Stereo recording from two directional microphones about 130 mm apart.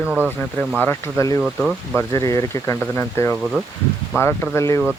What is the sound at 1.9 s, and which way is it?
Speech, 25° left (ahead or behind).